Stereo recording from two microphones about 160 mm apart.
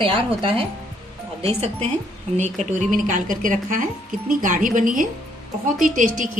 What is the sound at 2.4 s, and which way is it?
A woman's voice, 50° right (ahead or behind).